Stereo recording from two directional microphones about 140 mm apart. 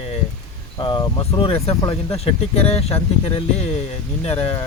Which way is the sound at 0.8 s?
35° left (ahead or behind).